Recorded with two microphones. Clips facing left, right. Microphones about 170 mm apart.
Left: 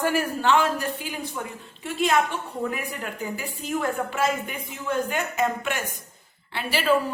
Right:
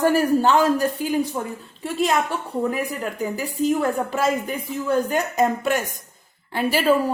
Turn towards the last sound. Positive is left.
turn(degrees=-40)  # may be behind; listen again after turning